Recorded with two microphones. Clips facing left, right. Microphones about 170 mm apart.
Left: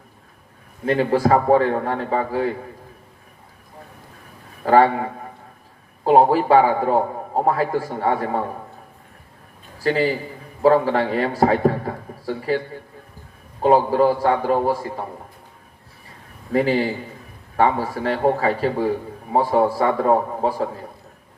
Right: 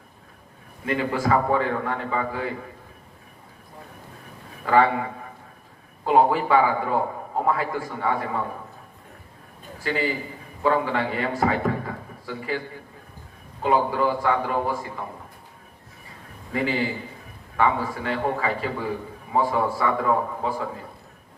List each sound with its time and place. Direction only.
0.9 s a man's voice: 40° left (ahead or behind)
4.6 s a man's voice: 40° left (ahead or behind)
6.1 s a man's voice: 35° left (ahead or behind)
9.7 s a man's voice: 35° left (ahead or behind)
13.6 s a man's voice: 40° left (ahead or behind)
16.5 s a man's voice: 40° left (ahead or behind)